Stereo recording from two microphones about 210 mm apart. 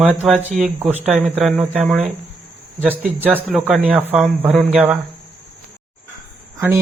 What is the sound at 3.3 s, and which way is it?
Speech, 5° right (ahead or behind).